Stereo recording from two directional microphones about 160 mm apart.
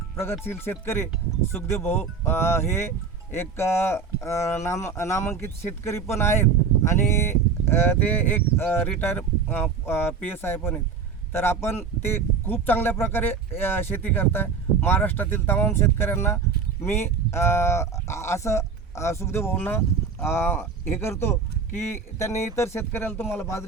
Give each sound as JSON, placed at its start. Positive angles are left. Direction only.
{"t": 0.2, "sound": "speech", "side_deg": 15}